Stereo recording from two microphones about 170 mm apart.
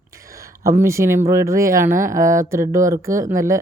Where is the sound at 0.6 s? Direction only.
15° right (ahead or behind).